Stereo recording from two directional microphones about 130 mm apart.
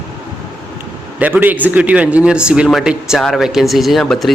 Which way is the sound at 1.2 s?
15° right (ahead or behind).